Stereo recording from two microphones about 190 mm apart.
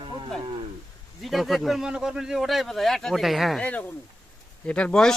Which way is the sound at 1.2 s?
Centre (ahead or behind).